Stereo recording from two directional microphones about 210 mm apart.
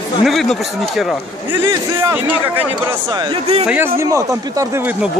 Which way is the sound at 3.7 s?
10° right (ahead or behind).